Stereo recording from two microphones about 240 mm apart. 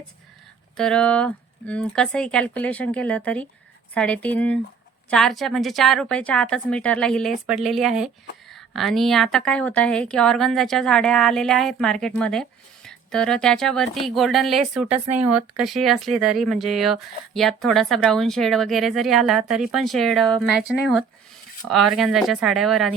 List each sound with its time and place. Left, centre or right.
0.8 s a woman's voice: centre
15.3 s speech: right
15.6 s a woman's voice: centre